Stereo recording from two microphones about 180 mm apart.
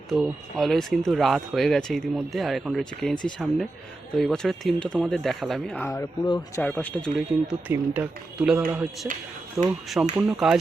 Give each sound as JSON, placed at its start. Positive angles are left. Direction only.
{"t": 0.1, "sound": "speech", "side_deg": 0}
{"t": 6.6, "sound": "speech", "side_deg": 5}